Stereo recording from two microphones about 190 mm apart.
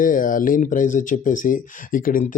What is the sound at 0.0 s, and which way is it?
Speech, 45° left (ahead or behind).